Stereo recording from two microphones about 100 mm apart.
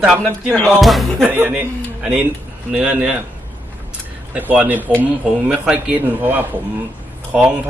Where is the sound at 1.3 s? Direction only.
15° right (ahead or behind).